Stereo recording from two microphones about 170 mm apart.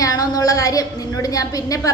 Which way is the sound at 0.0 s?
20° left (ahead or behind).